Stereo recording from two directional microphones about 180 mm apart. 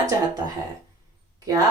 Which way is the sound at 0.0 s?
20° right (ahead or behind).